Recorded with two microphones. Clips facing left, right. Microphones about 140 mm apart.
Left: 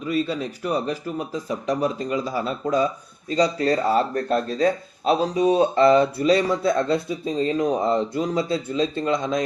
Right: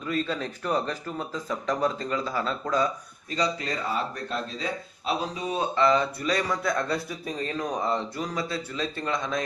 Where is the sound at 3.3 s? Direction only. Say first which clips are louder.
Left 8 dB; 35° left (ahead or behind).